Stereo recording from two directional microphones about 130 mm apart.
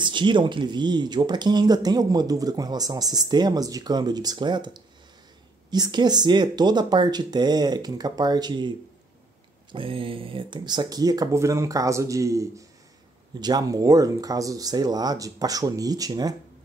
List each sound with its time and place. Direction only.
0.0 s speech: 35° right (ahead or behind)